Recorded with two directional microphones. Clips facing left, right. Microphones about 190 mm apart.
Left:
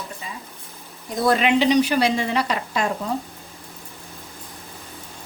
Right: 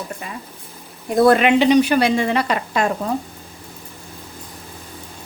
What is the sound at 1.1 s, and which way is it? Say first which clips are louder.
A woman's voice: right 6 dB; 60° right (ahead or behind).